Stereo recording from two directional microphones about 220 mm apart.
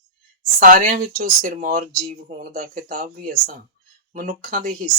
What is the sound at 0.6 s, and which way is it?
Speech, 40° right (ahead or behind).